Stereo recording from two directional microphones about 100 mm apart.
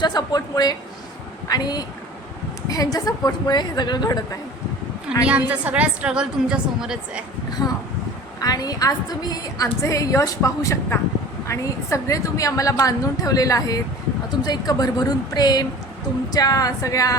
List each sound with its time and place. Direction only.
0.0 s a woman's voice: 45° left (ahead or behind)
5.2 s a woman's voice: 15° right (ahead or behind)
7.6 s a woman's voice: 35° left (ahead or behind)